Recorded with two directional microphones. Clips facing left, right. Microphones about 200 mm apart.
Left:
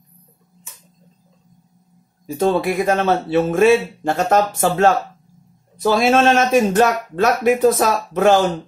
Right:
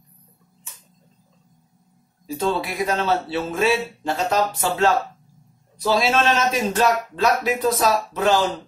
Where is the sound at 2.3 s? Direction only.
50° left (ahead or behind).